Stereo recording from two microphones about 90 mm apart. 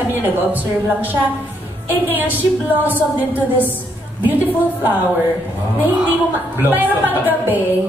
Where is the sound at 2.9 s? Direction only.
20° left (ahead or behind).